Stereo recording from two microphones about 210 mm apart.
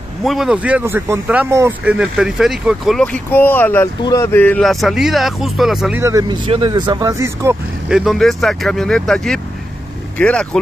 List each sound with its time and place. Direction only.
0.2 s speech: centre (ahead or behind)
6.0 s speech: 20° right (ahead or behind)
7.9 s speech: centre (ahead or behind)